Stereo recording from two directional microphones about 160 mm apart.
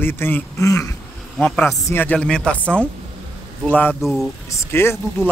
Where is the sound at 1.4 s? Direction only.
10° left (ahead or behind).